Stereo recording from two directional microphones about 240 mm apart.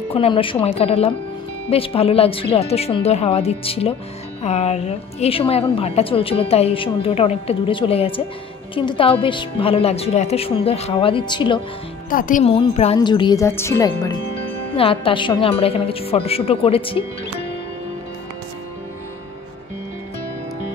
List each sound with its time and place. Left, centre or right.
0.1 s a woman's voice: left
12.1 s a woman's voice: left